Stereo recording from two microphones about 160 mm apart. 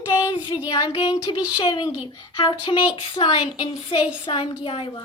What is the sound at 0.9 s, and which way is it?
Speech, 35° left (ahead or behind).